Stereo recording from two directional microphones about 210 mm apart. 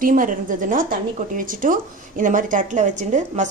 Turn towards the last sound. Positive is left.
turn(degrees=-35)  # may be behind; listen again after turning